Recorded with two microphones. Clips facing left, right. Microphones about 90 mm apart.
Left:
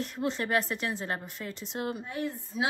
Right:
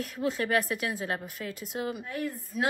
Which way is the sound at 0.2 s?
5° right (ahead or behind).